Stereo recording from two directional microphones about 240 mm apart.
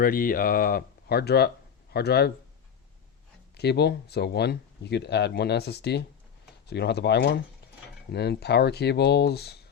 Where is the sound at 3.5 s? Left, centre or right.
Left.